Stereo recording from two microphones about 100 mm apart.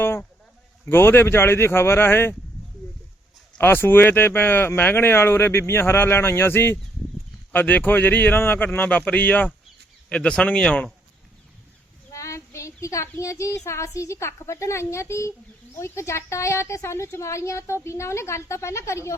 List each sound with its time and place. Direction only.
0.0 s a sound: 20° left (ahead or behind)
0.9 s a woman's voice: 20° left (ahead or behind)
3.6 s a woman's voice: 20° left (ahead or behind)
12.1 s a woman's voice: 30° left (ahead or behind)